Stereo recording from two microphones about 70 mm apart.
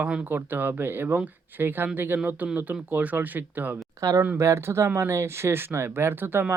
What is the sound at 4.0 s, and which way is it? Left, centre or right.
Speech, right.